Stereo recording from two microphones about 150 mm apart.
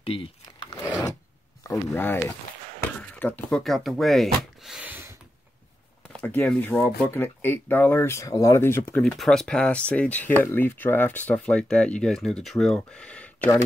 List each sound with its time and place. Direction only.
0.0 s a sound: 35° left (ahead or behind)
1.6 s speech: 15° left (ahead or behind); by 5.1 s 10° right (ahead or behind)
6.1 s speech: 10° left (ahead or behind)
9.0 s speech: 5° left (ahead or behind)